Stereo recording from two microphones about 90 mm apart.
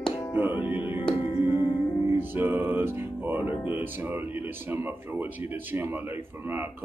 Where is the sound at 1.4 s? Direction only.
60° left (ahead or behind).